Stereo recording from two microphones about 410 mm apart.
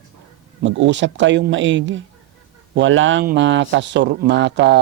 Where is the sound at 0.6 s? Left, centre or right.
Right.